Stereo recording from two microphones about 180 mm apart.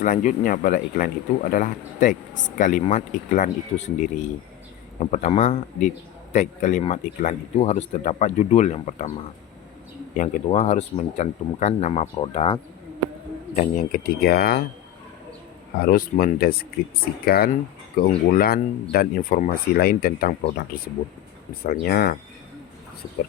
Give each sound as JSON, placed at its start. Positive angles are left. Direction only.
{"t": 0.0, "sound": "speech", "side_deg": 45}
{"t": 10.2, "sound": "speech", "side_deg": 40}
{"t": 13.6, "sound": "speech", "side_deg": 45}
{"t": 15.8, "sound": "speech", "side_deg": 55}